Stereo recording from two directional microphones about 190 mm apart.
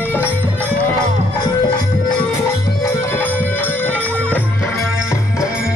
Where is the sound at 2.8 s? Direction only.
15° left (ahead or behind).